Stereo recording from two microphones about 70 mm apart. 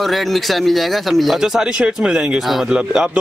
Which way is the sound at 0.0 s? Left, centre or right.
Centre.